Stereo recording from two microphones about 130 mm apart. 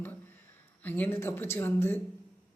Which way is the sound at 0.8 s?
15° left (ahead or behind).